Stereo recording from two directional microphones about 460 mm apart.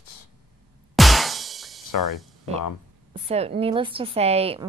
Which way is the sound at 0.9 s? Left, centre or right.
Centre.